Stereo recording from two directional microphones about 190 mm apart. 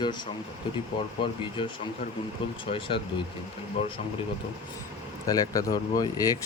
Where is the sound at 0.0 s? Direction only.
25° left (ahead or behind).